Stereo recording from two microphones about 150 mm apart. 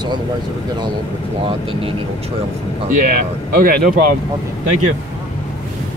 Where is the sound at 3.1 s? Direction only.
75° right (ahead or behind).